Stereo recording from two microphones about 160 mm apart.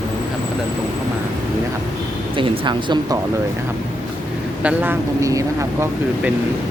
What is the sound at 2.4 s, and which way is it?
Speech, 30° right (ahead or behind).